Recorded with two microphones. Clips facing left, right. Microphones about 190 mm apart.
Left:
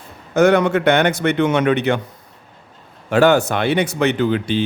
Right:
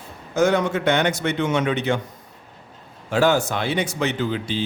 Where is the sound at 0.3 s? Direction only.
65° left (ahead or behind).